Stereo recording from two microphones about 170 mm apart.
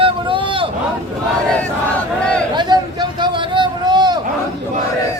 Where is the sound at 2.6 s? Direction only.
25° right (ahead or behind).